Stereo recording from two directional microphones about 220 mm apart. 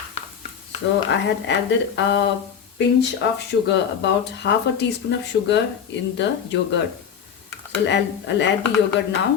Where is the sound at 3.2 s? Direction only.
55° left (ahead or behind).